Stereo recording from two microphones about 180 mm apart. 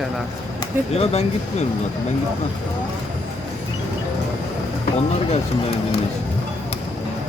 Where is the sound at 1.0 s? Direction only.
35° left (ahead or behind).